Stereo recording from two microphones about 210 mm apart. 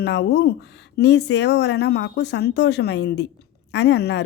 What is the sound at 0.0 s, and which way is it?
A woman's voice, 55° left (ahead or behind).